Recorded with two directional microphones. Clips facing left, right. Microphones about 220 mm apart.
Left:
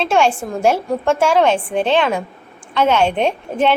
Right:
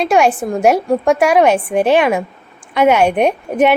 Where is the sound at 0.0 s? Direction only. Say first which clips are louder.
Right 3 dB; 15° right (ahead or behind).